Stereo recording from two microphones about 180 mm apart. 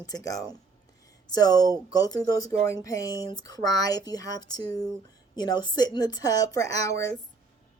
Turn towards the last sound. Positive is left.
turn(degrees=20)  # may be behind; listen again after turning